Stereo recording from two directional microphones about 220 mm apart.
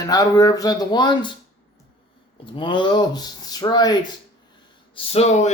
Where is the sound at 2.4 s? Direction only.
20° left (ahead or behind).